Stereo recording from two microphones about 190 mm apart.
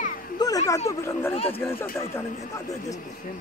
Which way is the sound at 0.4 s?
20° left (ahead or behind).